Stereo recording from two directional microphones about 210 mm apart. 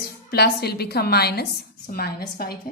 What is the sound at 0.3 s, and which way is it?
Speech, 50° left (ahead or behind).